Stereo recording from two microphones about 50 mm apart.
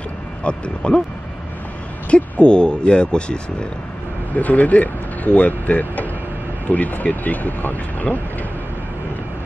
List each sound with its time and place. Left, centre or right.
0.4 s speech: left
2.0 s speech: left
4.3 s speech: left